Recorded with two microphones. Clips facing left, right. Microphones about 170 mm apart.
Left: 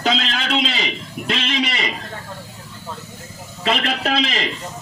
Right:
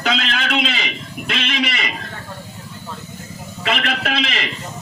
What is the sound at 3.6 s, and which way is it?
Speech, 30° left (ahead or behind).